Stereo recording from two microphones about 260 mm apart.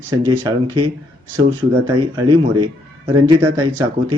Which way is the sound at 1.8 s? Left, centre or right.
Centre.